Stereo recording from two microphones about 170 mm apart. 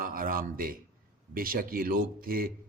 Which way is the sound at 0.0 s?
55° right (ahead or behind).